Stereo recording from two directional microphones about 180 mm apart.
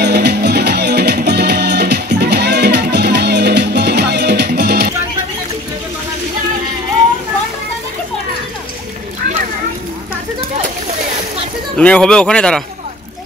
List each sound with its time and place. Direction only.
0.0 s music: 65° right (ahead or behind)
11.1 s splash: 40° right (ahead or behind)
11.7 s speech: 5° left (ahead or behind)